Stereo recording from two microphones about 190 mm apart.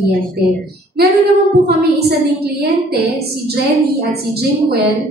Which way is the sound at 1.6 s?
55° right (ahead or behind).